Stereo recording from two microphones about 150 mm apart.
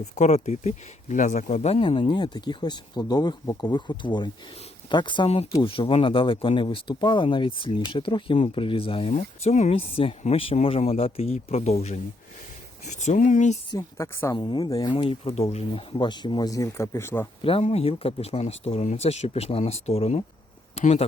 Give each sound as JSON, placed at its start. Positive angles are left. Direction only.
{"t": 0.0, "sound": "speech", "side_deg": 50}
{"t": 9.1, "sound": "speech", "side_deg": 50}
{"t": 13.7, "sound": "speech", "side_deg": 20}
{"t": 14.3, "sound": "speech", "side_deg": 30}
{"t": 17.4, "sound": "speech", "side_deg": 40}